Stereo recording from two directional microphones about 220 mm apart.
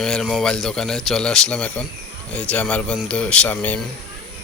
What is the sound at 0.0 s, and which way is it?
Speech, centre (ahead or behind).